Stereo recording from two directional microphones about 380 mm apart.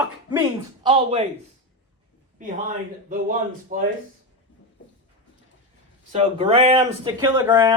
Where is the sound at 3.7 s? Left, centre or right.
Right.